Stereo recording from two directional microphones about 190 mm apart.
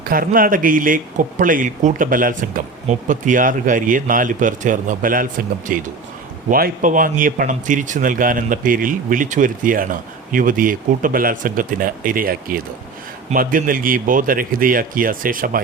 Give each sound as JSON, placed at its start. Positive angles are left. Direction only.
{"t": 0.0, "sound": "speech", "side_deg": -50}